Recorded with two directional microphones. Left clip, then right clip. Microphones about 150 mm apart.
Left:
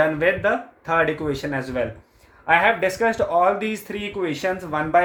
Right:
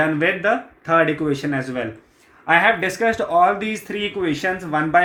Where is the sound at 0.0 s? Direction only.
35° left (ahead or behind).